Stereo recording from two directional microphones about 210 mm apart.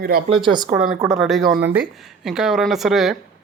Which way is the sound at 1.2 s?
Centre (ahead or behind).